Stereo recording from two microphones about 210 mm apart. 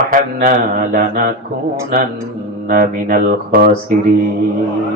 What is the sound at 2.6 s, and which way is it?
A man's voice, 40° right (ahead or behind).